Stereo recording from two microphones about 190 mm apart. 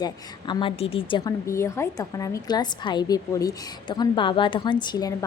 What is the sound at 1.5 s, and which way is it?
A woman's voice, 15° left (ahead or behind).